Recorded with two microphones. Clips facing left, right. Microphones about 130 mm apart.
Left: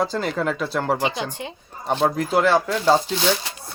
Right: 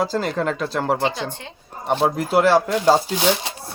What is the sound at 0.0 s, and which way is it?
Speech, centre (ahead or behind).